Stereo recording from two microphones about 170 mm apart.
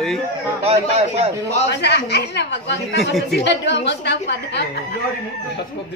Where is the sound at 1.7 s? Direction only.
85° left.